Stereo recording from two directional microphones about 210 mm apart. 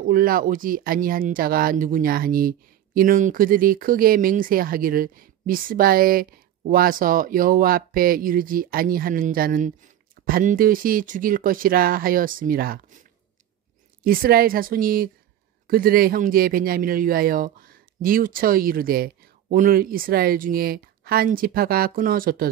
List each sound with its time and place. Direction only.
0.1 s speech: 40° right (ahead or behind)
14.0 s speech: 45° right (ahead or behind)